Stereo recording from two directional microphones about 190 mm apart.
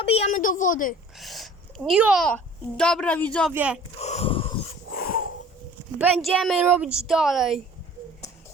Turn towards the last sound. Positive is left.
turn(degrees=0)  # may be behind; listen again after turning